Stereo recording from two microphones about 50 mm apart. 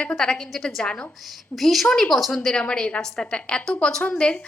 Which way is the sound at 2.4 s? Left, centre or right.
Centre.